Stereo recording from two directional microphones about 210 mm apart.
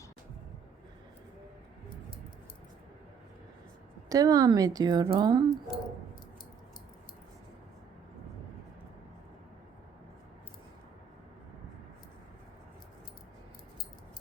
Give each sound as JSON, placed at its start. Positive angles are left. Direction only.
{"t": 4.1, "sound": "speech", "side_deg": -15}